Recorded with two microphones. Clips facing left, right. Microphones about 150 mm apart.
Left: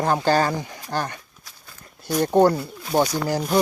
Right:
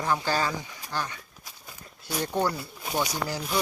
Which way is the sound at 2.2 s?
45° left (ahead or behind).